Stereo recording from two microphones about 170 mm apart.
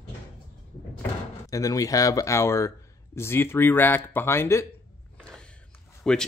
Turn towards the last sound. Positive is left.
turn(degrees=5)  # may be behind; listen again after turning